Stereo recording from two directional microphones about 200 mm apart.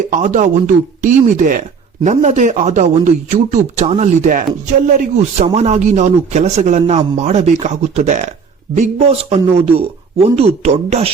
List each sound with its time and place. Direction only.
0.1 s a man's voice: 40° right (ahead or behind)